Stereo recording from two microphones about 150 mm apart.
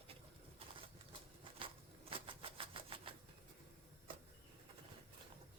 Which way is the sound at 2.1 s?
35° right (ahead or behind).